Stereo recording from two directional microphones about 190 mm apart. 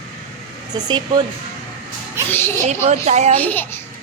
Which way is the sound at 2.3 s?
10° left (ahead or behind).